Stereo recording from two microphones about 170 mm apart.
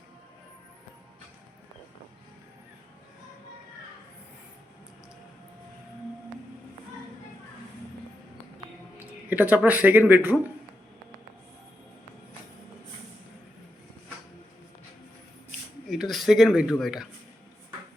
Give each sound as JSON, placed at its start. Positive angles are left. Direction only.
{"t": 9.0, "sound": "speech", "side_deg": -10}
{"t": 15.9, "sound": "speech", "side_deg": 0}